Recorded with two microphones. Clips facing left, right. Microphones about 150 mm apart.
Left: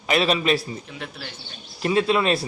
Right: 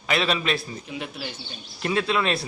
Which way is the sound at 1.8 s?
35° left (ahead or behind).